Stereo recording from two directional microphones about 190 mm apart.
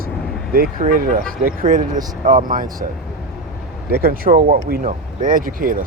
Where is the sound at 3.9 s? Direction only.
50° right (ahead or behind).